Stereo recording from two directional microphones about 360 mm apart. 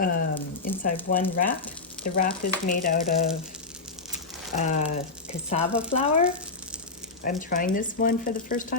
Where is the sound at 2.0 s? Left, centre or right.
Centre.